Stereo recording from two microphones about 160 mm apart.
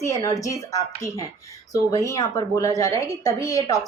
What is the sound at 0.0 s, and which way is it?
A woman's voice, 20° left (ahead or behind).